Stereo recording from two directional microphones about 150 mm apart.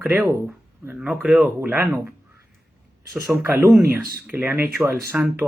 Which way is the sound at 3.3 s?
15° right (ahead or behind).